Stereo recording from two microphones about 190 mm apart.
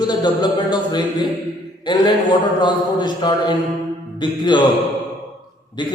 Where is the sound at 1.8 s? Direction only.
25° left (ahead or behind).